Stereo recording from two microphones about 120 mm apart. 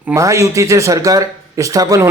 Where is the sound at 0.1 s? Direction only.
25° right (ahead or behind).